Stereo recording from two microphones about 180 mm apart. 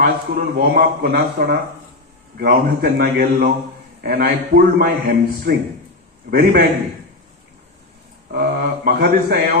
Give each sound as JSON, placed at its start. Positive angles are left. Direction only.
{"t": 0.0, "sound": "a man's voice", "side_deg": -55}
{"t": 8.3, "sound": "a man's voice", "side_deg": -60}